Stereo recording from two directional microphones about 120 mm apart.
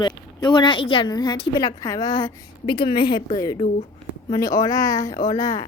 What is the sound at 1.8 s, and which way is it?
Speech, 30° left (ahead or behind).